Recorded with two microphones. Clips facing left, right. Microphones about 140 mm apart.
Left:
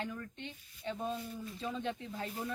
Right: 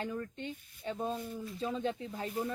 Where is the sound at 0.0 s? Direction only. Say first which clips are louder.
Right 4 dB; 35° right (ahead or behind).